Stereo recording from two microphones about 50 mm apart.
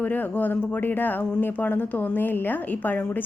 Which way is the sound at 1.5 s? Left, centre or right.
Left.